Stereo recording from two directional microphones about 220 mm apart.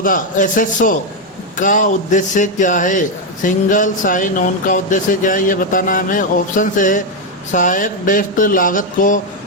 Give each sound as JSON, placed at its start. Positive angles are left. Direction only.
{"t": 0.0, "sound": "speech", "side_deg": 40}